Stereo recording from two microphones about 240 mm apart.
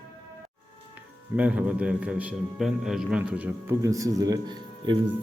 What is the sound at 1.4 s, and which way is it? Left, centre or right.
A man's voice, centre.